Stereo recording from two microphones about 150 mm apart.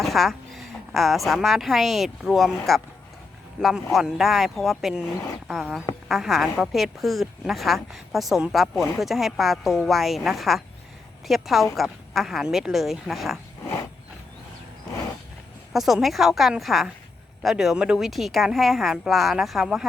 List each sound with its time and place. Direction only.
0.0 s a woman's voice: centre (ahead or behind)
3.9 s a woman's voice: centre (ahead or behind)
8.7 s speech: 20° left (ahead or behind)
9.0 s a woman's voice: centre (ahead or behind)
15.7 s a woman's voice: centre (ahead or behind)